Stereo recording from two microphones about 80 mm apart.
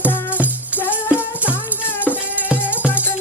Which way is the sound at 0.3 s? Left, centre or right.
Centre.